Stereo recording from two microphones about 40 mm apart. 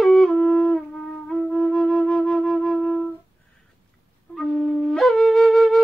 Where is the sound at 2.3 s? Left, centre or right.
Centre.